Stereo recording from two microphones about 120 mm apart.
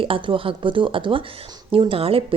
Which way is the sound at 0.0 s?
50° right (ahead or behind).